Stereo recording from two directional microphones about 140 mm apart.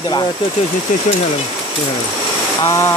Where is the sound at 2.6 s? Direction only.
20° left (ahead or behind).